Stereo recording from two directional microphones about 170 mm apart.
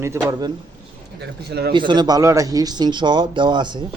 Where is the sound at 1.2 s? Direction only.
75° right (ahead or behind).